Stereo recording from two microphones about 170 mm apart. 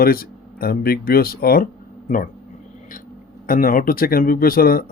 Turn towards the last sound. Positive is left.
turn(degrees=60)  # may be behind; listen again after turning